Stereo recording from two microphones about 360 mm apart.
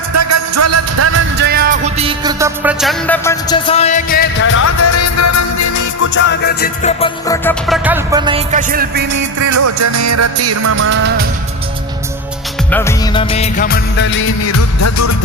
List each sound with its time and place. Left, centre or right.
0.1 s music: right; by 6.1 s left
6.1 s music: left; by 7.8 s centre
7.9 s music: centre; by 9.2 s right
9.4 s music: right
12.7 s music of bollywood: centre; by 15.1 s left